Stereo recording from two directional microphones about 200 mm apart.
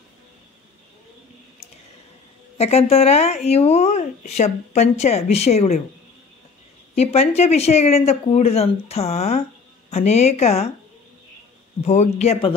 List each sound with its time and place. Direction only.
2.5 s speech: 30° left (ahead or behind)
7.0 s speech: 30° left (ahead or behind)
11.8 s speech: 35° left (ahead or behind)